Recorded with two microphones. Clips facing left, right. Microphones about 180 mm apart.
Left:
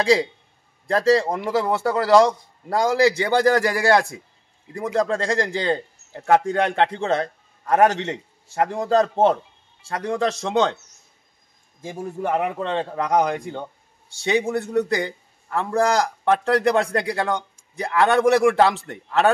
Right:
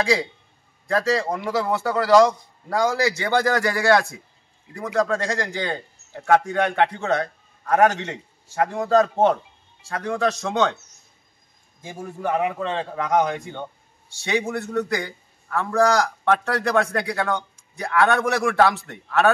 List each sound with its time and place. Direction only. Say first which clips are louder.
0.8 s a man's voice: left 4 dB; 30° left (ahead or behind)
11.8 s a man's voice: left 2 dB; 25° left (ahead or behind)
14.2 s a man's voice: left 3 dB; 25° left (ahead or behind)